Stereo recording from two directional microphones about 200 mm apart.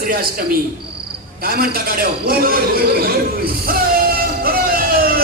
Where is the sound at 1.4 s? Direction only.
50° right (ahead or behind).